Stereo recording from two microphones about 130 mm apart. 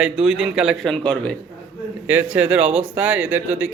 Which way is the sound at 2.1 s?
15° right (ahead or behind).